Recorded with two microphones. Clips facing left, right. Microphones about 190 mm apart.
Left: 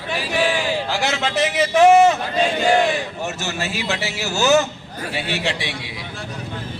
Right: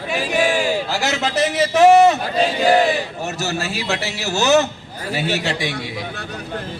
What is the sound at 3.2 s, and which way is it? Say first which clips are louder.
A man's voice: right 2 dB; 35° right (ahead or behind).